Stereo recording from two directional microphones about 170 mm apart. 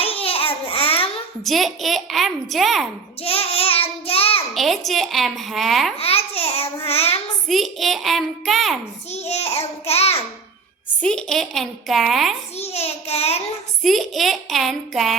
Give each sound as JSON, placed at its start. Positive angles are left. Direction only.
{"t": 0.0, "sound": "babbling", "side_deg": 35}
{"t": 1.5, "sound": "a child's voice", "side_deg": 0}
{"t": 3.2, "sound": "child singing", "side_deg": 35}
{"t": 4.5, "sound": "a child's voice", "side_deg": 0}
{"t": 6.0, "sound": "babbling", "side_deg": 35}
{"t": 6.8, "sound": "child singing", "side_deg": 35}
{"t": 7.4, "sound": "a child's voice", "side_deg": 0}
{"t": 9.1, "sound": "child singing", "side_deg": 40}
{"t": 11.0, "sound": "a child's voice", "side_deg": 5}
{"t": 12.5, "sound": "a child's voice", "side_deg": 40}
{"t": 13.8, "sound": "a child's voice", "side_deg": 0}